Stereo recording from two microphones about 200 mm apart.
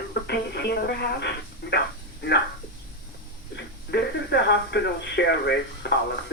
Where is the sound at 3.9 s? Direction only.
55° left (ahead or behind).